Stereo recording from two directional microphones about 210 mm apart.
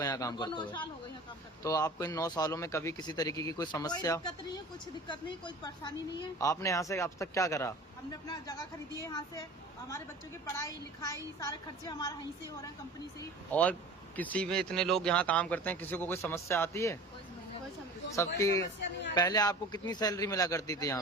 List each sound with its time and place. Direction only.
0.0 s a man's voice: 15° left (ahead or behind)
10.6 s speech: 15° left (ahead or behind)
13.1 s speech: 10° left (ahead or behind)
18.3 s speech: 15° left (ahead or behind)